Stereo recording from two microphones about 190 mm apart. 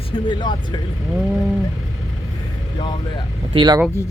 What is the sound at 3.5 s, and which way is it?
Speech, 25° right (ahead or behind).